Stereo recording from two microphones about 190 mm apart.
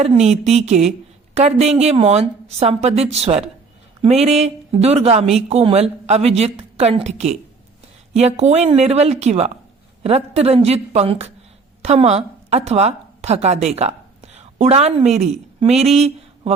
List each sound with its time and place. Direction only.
0.0 s a woman's voice: 35° right (ahead or behind)